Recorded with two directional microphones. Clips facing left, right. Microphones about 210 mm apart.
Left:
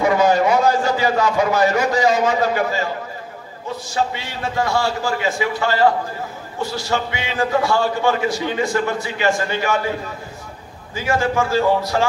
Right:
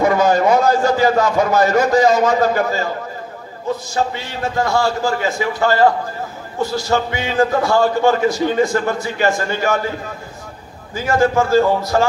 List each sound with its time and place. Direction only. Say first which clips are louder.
0.0 s a man's voice: right 1 dB; 45° right (ahead or behind)
3.9 s a man's voice: right 2 dB; 45° right (ahead or behind)
11.0 s a man's voice: right 4 dB; 45° right (ahead or behind)